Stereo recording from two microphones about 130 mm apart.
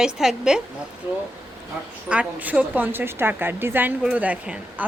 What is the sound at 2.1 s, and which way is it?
Speech, 10° right (ahead or behind).